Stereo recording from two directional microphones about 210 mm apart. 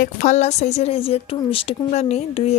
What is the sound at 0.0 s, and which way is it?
A woman's voice, 35° left (ahead or behind).